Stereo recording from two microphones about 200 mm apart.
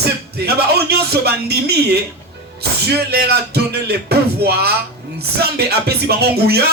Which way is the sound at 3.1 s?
55° right (ahead or behind).